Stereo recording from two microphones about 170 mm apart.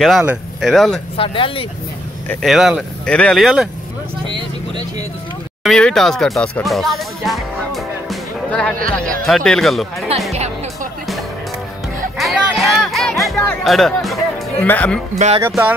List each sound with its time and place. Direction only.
0.2 s speech: 5° right (ahead or behind)
1.1 s speech: 30° left (ahead or behind)
2.4 s speech: centre (ahead or behind)
4.3 s speech: 25° right (ahead or behind)
5.6 s music: 5° left (ahead or behind)
8.7 s speech: 55° right (ahead or behind)
9.2 s speech: 5° left (ahead or behind)
10.3 s music: 40° right (ahead or behind)
12.2 s music: centre (ahead or behind)
14.7 s speech: 10° left (ahead or behind)
15.1 s speech: 40° right (ahead or behind)